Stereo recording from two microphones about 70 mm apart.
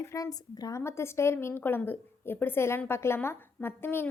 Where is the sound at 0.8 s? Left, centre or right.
Left.